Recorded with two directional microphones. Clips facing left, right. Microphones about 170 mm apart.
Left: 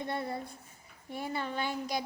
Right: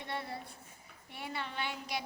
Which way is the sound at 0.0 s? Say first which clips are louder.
Left 5 dB; 40° left (ahead or behind).